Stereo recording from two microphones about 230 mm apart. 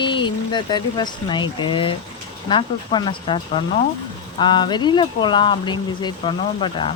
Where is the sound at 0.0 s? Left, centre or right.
Left.